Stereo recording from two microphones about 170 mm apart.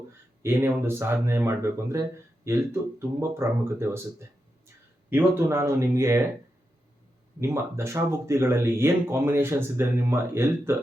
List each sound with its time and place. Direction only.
0.1 s speech: 15° right (ahead or behind)
7.4 s speech: 15° right (ahead or behind)